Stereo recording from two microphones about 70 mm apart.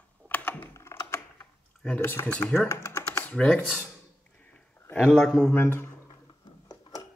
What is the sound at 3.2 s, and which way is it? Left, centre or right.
Speech, centre.